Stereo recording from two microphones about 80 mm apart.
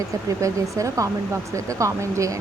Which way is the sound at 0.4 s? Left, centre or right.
Right.